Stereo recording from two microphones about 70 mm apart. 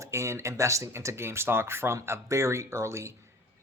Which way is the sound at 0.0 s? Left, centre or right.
Right.